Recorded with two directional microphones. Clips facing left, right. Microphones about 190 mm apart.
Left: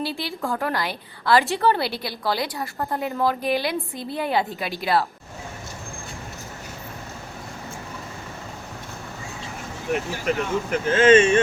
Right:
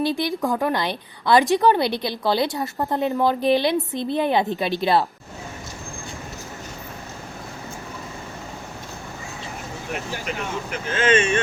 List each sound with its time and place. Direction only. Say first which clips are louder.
0.0 s a woman's voice: right 6 dB; 15° right (ahead or behind)
10.2 s speech: left 5 dB; 45° left (ahead or behind)